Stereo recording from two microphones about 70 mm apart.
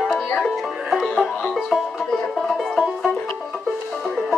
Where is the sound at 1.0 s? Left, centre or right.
Centre.